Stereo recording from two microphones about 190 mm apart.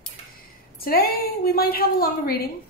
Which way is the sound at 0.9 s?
50° left (ahead or behind).